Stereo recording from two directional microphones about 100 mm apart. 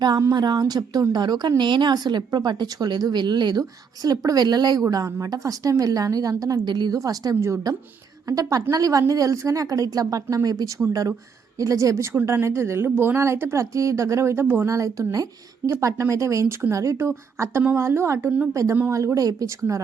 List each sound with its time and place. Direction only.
0.0 s a woman's voice: 40° right (ahead or behind)